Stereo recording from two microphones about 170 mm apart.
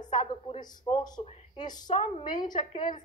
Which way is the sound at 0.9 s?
25° left (ahead or behind).